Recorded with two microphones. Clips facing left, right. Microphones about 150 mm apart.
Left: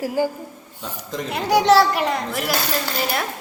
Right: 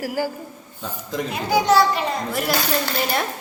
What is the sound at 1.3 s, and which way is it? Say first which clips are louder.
Speech: left 3 dB; 70° left (ahead or behind).